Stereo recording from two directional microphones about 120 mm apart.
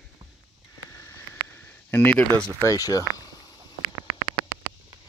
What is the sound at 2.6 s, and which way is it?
Speech, 30° left (ahead or behind).